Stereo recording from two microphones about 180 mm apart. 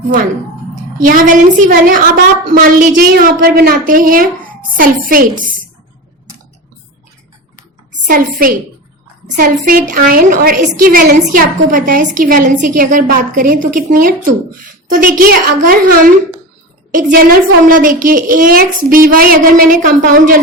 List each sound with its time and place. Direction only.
1.0 s a woman's voice: 50° right (ahead or behind)
8.0 s a woman's voice: 50° right (ahead or behind)